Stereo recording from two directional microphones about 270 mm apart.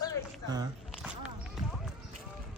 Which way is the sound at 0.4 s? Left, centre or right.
Centre.